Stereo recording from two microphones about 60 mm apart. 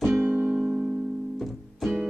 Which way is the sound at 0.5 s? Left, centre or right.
Centre.